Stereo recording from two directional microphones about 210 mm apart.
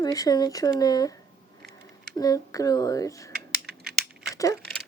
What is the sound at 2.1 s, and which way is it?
Speech, 15° left (ahead or behind).